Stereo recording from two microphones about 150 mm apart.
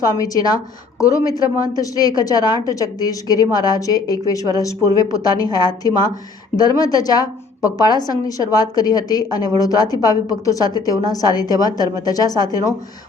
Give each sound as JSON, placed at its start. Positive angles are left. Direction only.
{"t": 0.0, "sound": "a woman's voice", "side_deg": 25}